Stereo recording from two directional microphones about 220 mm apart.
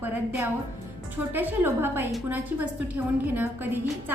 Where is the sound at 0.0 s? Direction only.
10° right (ahead or behind).